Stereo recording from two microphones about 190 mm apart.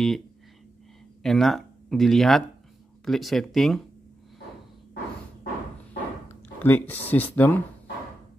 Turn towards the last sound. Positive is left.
turn(degrees=10)  # may be behind; listen again after turning